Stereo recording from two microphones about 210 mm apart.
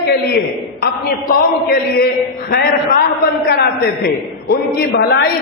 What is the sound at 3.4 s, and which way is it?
A man's voice, 50° left (ahead or behind).